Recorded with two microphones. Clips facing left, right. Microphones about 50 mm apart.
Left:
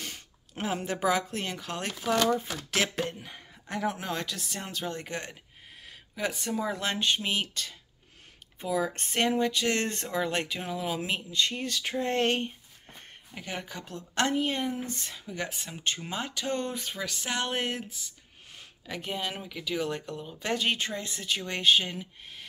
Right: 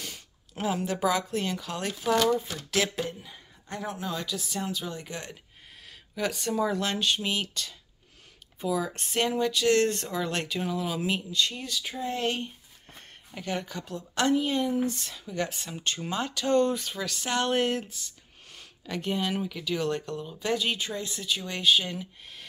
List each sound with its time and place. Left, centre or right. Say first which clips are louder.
0.0 s speech: even; left
3.1 s speech: even; left
4.1 s a sound: even; left
4.6 s speech: right 1 dB; left
5.9 s a sound: right 2 dB; centre
6.6 s speech: right 3 dB; left
11.3 s speech: even; left
11.7 s a sound: left 3 dB; left
13.3 s speech: right 5 dB; centre
13.8 s speech: right 2 dB; left; by 20.3 s centre
20.3 s speech: even; left
21.8 s speech: right 2 dB; centre